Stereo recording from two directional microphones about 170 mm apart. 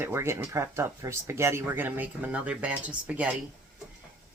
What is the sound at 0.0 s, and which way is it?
Speech, 15° right (ahead or behind).